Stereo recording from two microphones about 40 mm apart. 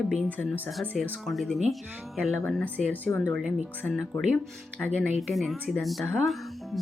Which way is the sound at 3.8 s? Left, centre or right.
Centre.